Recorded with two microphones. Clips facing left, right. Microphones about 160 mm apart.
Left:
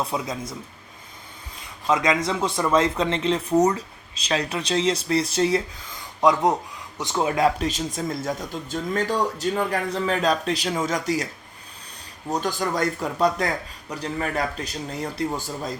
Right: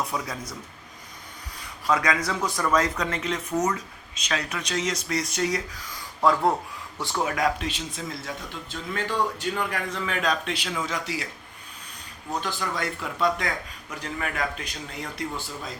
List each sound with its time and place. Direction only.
0.0 s speech: 25° left (ahead or behind)
1.9 s speech: 20° left (ahead or behind)
6.2 s speech: 20° left (ahead or behind)
7.7 s speech: 40° left (ahead or behind)
12.3 s speech: 45° left (ahead or behind)